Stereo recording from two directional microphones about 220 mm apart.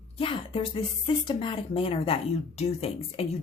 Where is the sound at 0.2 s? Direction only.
25° left (ahead or behind).